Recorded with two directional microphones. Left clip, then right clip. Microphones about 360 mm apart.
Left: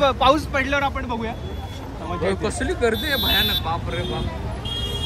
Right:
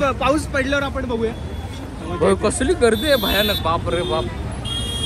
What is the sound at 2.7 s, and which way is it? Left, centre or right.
Speech, right.